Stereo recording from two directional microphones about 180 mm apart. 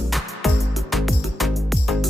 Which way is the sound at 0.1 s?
Centre (ahead or behind).